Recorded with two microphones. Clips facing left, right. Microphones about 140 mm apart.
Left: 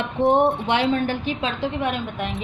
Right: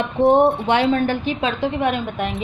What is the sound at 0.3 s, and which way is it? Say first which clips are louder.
A woman's voice: right 3 dB; 35° right (ahead or behind).